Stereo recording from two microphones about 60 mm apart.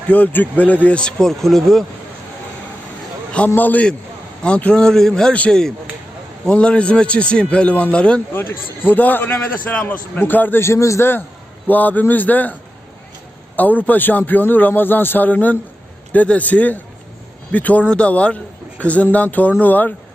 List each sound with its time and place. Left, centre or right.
0.1 s a man's voice: left
1.3 s speech: centre
3.5 s a man's voice: left
4.4 s a man's voice: centre
8.3 s a man's voice: left
10.6 s a man's voice: left
11.7 s a man's voice: left
13.6 s a man's voice: left